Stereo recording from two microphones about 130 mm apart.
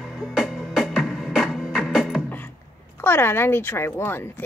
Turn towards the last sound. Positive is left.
turn(degrees=15)  # may be behind; listen again after turning